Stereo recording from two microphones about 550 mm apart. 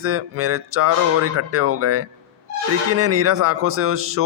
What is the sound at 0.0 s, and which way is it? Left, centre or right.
Speech, right.